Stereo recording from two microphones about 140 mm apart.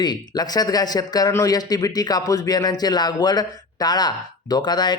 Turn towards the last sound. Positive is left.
turn(degrees=30)  # may be behind; listen again after turning